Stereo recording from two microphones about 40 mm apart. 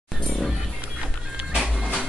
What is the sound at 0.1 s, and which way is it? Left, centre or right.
Music, centre.